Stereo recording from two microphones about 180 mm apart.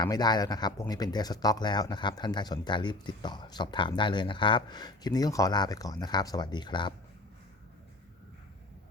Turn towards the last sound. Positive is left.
turn(degrees=25)  # may be behind; listen again after turning